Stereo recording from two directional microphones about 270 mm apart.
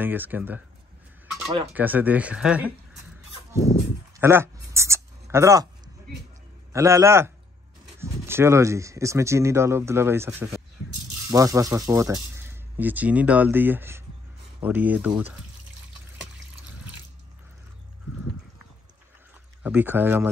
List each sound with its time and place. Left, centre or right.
0.0 s speech: centre
1.7 s speech: centre
3.5 s a sound: left
4.2 s a sound: centre
6.7 s speech: centre
19.6 s speech: centre